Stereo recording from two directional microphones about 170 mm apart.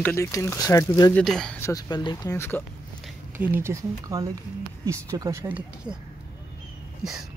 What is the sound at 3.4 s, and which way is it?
Speech, 15° right (ahead or behind).